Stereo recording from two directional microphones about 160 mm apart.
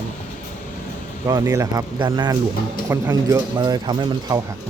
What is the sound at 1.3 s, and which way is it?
Speech, 25° right (ahead or behind).